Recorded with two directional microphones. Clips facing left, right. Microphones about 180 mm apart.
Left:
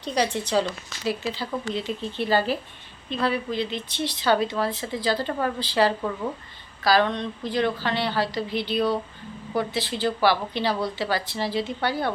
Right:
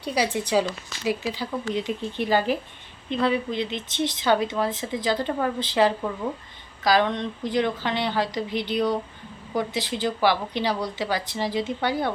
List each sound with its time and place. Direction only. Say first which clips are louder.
0.0 s speech: even; 10° right (ahead or behind)